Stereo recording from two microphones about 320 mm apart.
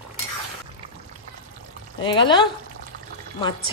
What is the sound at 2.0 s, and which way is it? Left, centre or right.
Speech, centre.